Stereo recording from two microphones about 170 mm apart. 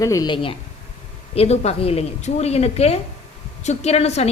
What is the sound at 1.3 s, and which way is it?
A woman's voice, 40° left (ahead or behind).